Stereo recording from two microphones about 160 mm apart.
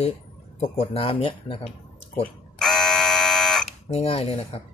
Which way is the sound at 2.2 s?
5° left (ahead or behind).